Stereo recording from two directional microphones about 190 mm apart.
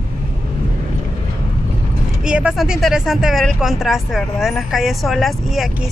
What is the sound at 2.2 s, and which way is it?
Speech, 5° right (ahead or behind).